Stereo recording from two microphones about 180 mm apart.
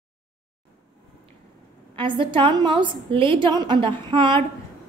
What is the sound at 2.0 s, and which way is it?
A woman's voice, 30° right (ahead or behind).